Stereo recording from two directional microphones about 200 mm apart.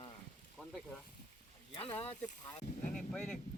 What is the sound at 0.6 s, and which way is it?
Snake, 5° left (ahead or behind).